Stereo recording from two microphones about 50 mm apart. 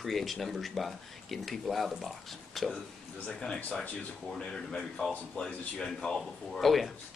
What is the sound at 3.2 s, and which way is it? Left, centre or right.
Speech, centre.